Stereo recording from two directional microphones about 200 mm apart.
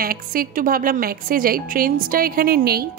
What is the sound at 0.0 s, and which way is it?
A woman's voice, 45° right (ahead or behind).